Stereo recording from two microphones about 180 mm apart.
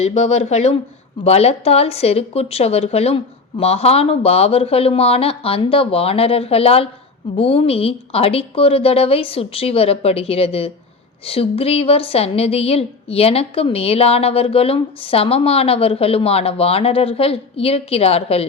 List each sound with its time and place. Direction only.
0.0 s a woman's voice: 35° left (ahead or behind)